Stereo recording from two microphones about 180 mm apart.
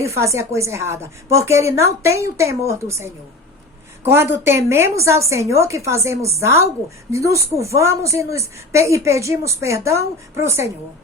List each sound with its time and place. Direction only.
0.2 s a woman's voice: 15° right (ahead or behind)